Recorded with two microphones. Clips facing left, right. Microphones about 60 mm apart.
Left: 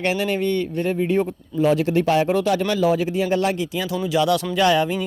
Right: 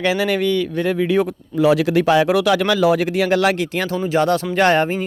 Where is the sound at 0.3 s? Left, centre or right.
Right.